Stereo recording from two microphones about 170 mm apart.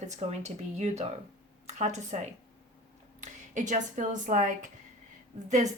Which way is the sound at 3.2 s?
45° right (ahead or behind).